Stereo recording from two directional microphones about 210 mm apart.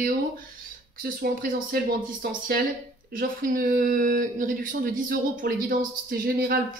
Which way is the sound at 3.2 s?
45° right (ahead or behind).